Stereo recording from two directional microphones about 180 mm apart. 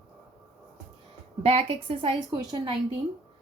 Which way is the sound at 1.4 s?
35° right (ahead or behind).